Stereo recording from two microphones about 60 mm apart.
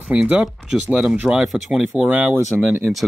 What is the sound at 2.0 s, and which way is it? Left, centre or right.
Speech, centre.